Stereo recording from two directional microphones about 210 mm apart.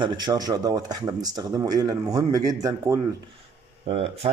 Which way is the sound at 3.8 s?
25° right (ahead or behind).